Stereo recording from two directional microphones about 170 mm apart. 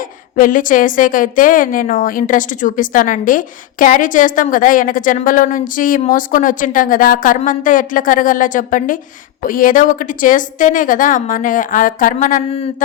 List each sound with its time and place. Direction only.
0.0 s a woman's voice: 55° left (ahead or behind)